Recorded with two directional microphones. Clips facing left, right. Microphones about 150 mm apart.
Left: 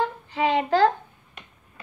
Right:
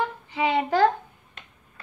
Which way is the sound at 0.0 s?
15° right (ahead or behind).